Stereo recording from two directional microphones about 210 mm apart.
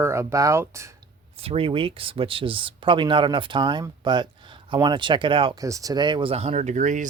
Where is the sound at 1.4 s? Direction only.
25° right (ahead or behind).